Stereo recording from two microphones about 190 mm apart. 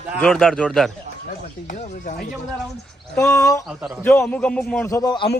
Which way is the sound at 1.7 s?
35° left (ahead or behind).